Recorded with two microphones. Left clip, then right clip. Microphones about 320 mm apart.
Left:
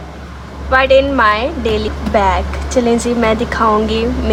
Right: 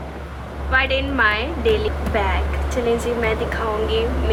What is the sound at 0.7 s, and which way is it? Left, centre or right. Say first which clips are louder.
A woman's voice: left 9 dB; centre.